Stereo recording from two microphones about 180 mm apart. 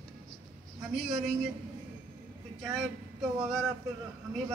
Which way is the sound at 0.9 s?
Centre (ahead or behind).